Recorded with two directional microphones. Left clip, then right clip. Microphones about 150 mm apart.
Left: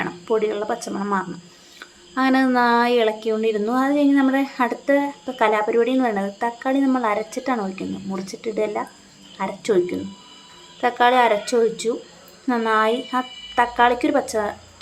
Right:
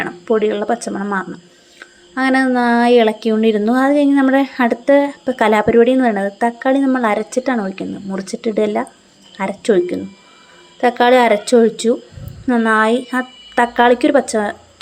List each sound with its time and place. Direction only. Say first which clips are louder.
0.0 s speech: right 5 dB; 25° right (ahead or behind)